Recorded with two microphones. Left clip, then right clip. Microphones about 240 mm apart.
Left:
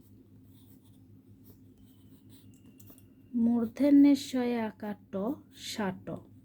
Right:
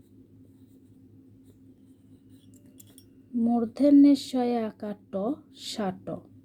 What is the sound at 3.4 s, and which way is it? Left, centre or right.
Speech, centre.